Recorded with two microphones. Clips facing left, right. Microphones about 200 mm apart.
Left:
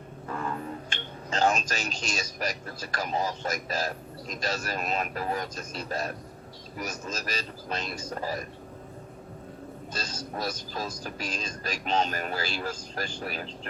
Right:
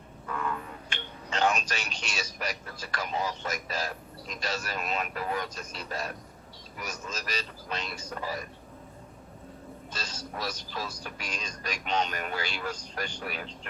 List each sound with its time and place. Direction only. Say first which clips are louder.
0.3 s speech: left 1 dB; 35° left (ahead or behind)
9.9 s speech: left 3 dB; 40° left (ahead or behind)